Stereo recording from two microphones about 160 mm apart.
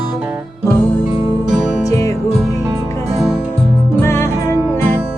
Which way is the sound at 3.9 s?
15° left (ahead or behind).